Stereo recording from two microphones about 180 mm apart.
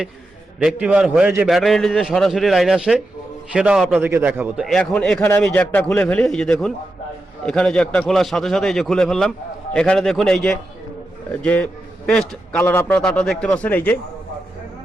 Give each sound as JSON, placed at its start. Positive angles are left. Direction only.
{"t": 0.6, "sound": "a man's voice", "side_deg": -5}